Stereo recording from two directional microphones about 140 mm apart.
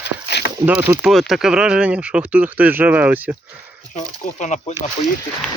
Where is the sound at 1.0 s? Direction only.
Centre (ahead or behind).